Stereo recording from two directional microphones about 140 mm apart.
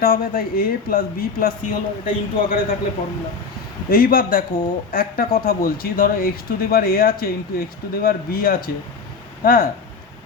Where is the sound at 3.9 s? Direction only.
90° left.